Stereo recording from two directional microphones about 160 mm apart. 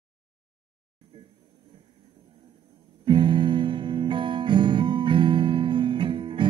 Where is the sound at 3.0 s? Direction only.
30° right (ahead or behind).